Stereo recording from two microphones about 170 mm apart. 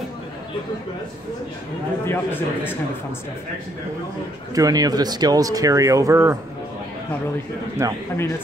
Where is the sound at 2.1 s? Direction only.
10° left (ahead or behind).